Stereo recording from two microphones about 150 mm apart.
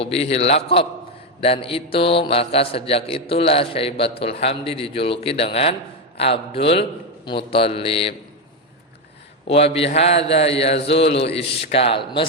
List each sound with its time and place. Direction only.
0.0 s a man's voice: 40° left (ahead or behind)
9.5 s a man's voice: 40° left (ahead or behind)